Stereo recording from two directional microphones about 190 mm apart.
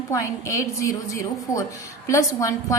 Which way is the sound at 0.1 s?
15° left (ahead or behind).